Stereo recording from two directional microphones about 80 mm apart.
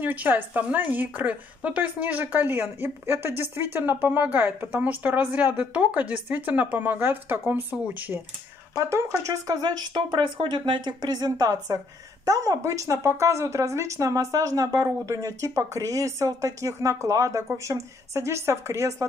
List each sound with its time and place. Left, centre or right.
0.0 s a woman's voice: right
8.7 s speech: right